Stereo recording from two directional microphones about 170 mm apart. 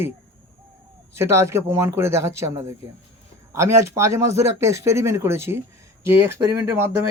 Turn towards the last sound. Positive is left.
turn(degrees=-15)  # may be behind; listen again after turning